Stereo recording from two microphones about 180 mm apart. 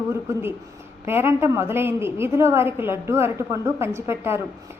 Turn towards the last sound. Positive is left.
turn(degrees=-15)  # may be behind; listen again after turning